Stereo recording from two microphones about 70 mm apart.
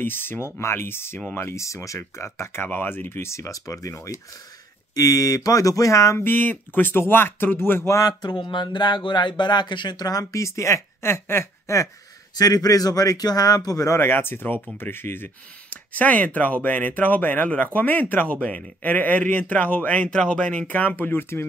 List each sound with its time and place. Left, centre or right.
0.0 s speech: left
6.1 s speech: left
8.2 s speech: left
10.4 s speech: left
12.4 s speech: left
13.9 s speech: left